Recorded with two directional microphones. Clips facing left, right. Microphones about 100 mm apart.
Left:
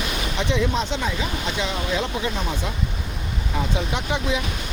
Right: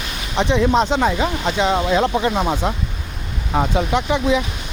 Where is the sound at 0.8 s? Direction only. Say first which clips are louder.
Right 8 dB; 50° right (ahead or behind).